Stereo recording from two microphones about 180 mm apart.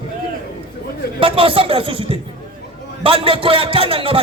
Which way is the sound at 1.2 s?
30° right (ahead or behind).